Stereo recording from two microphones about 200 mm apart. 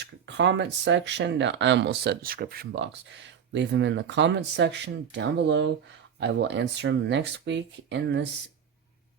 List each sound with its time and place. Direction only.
0.0 s speech: 60° right (ahead or behind)